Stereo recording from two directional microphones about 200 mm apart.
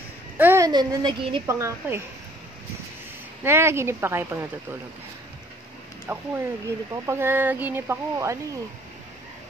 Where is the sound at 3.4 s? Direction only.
10° right (ahead or behind).